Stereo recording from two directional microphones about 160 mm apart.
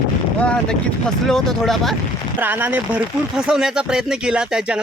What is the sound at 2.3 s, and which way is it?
Speech, 10° right (ahead or behind).